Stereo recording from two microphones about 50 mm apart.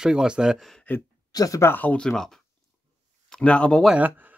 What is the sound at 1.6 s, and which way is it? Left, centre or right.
Speech, left.